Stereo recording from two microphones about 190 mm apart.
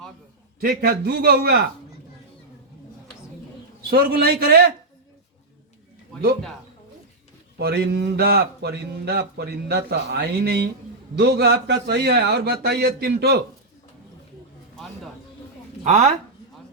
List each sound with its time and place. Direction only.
0.6 s a man's voice: 50° right (ahead or behind)
3.8 s speech: 55° right (ahead or behind)
7.6 s speech: 60° right (ahead or behind)
15.8 s speech: 35° right (ahead or behind)